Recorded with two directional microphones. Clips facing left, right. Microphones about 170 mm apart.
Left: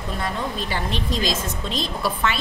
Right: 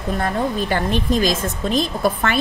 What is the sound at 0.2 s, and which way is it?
A woman's voice, 50° right (ahead or behind).